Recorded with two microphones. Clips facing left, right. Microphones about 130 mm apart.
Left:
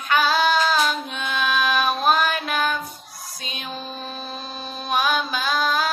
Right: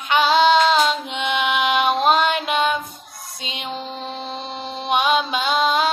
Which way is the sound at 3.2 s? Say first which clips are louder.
Right 4 dB; 25° right (ahead or behind).